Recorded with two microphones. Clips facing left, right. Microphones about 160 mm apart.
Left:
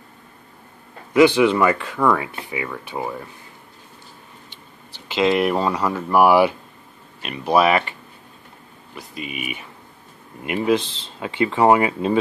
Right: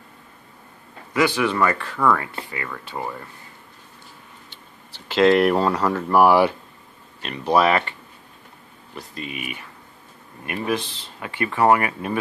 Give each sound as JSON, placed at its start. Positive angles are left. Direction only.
{"t": 1.1, "sound": "speech", "side_deg": 20}
{"t": 5.0, "sound": "speech", "side_deg": 0}
{"t": 8.9, "sound": "speech", "side_deg": 10}